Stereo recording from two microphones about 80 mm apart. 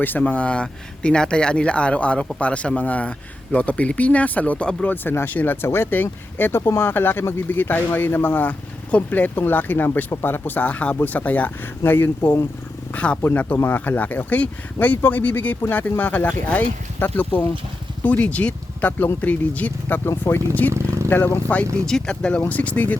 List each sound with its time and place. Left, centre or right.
0.0 s speech: left
20.1 s speech: left
20.7 s vehicle: right
21.1 s speech: left
21.8 s speech: centre